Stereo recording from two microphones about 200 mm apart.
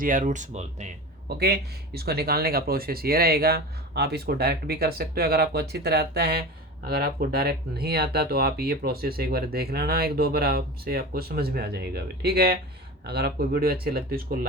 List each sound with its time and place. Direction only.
0.0 s speech: 40° right (ahead or behind)
1.3 s speech: 50° right (ahead or behind)